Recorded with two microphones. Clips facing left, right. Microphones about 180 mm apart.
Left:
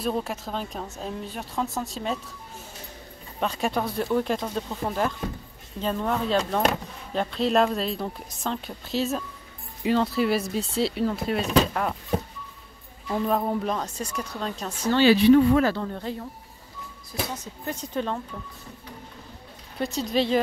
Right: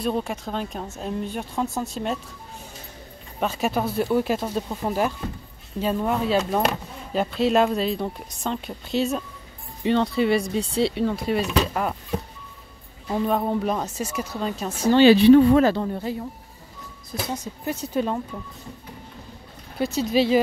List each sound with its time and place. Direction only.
0.0 s speech: centre (ahead or behind)
3.3 s speech: 5° right (ahead or behind)
13.1 s speech: centre (ahead or behind)
15.0 s speech: 25° right (ahead or behind)
16.0 s speech: 5° right (ahead or behind)
19.8 s speech: 5° right (ahead or behind)